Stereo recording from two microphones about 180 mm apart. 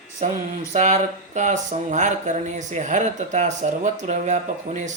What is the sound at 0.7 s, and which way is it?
Speech, 40° right (ahead or behind).